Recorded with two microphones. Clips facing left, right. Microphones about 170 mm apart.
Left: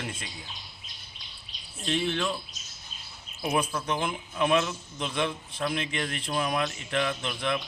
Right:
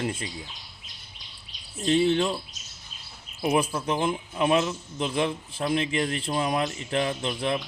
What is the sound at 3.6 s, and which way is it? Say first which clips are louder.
Speech: right 3 dB; 30° right (ahead or behind).